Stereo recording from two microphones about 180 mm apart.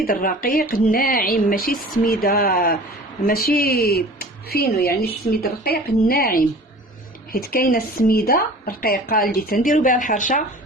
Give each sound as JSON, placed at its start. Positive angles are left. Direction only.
{"t": 0.0, "sound": "speech", "side_deg": 55}